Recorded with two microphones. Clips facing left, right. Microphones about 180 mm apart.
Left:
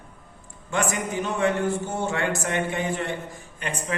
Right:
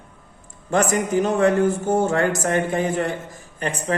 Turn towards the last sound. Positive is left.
turn(degrees=-40)  # may be behind; listen again after turning